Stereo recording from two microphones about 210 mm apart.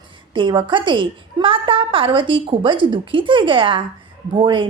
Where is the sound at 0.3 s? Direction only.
25° right (ahead or behind).